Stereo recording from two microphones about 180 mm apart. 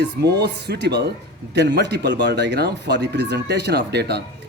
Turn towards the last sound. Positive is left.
turn(degrees=-65)  # may be behind; listen again after turning